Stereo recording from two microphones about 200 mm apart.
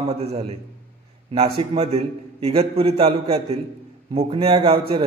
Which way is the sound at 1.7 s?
30° right (ahead or behind).